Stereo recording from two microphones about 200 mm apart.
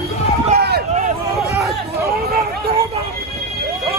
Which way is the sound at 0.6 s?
55° right (ahead or behind).